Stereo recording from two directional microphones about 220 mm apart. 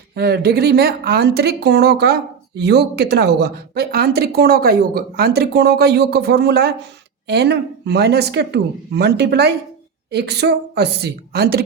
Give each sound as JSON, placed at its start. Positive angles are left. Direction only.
{"t": 0.1, "sound": "speech", "side_deg": -45}